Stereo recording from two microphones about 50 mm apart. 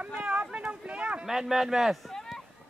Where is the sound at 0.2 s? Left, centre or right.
Right.